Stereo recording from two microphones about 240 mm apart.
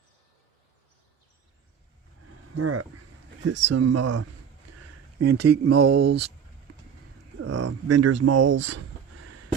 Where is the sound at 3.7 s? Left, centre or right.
Right.